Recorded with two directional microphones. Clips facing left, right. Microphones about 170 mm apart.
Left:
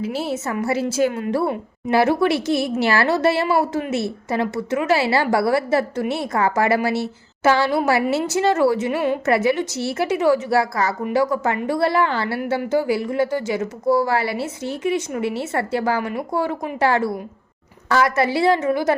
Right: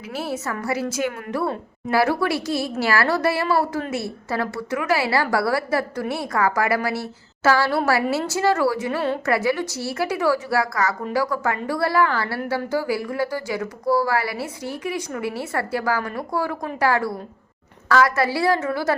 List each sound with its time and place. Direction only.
0.0 s a woman's voice: 25° left (ahead or behind)